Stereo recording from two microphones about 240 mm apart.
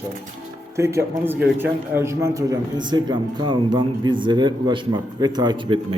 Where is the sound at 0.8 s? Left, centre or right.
Centre.